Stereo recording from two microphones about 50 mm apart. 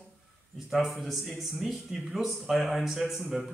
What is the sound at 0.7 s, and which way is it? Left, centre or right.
Speech, centre.